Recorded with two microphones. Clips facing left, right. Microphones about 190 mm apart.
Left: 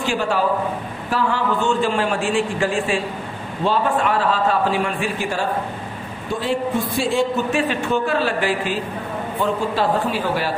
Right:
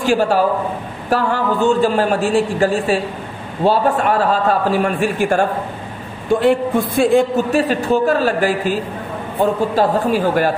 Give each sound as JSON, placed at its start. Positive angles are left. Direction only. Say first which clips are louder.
{"t": 0.0, "sound": "a man's voice", "louder": "right 6 dB", "side_deg": -45}
{"t": 7.5, "sound": "a man's voice", "louder": "right 5 dB", "side_deg": -40}